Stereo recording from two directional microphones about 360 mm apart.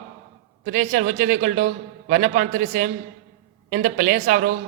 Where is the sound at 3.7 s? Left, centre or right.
Right.